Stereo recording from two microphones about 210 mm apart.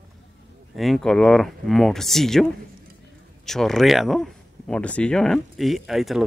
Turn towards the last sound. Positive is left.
turn(degrees=0)  # may be behind; listen again after turning